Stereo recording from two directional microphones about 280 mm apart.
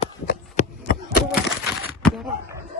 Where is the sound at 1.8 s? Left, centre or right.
Centre.